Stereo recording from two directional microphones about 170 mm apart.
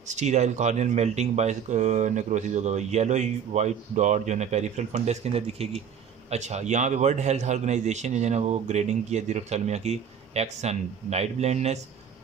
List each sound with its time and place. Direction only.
0.1 s a man's voice: 45° right (ahead or behind)